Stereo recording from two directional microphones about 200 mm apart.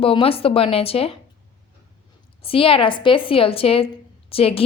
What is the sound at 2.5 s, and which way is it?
A woman's voice, 25° left (ahead or behind).